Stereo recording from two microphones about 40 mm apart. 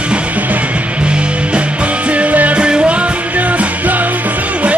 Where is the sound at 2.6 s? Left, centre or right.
Right.